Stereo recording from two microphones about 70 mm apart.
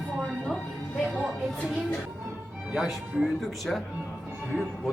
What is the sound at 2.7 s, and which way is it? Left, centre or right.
Speech, centre.